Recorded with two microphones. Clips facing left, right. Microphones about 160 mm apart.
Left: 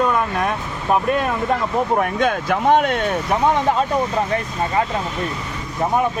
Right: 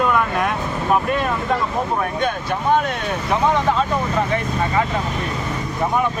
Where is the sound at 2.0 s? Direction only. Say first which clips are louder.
Left 3 dB; 90° left.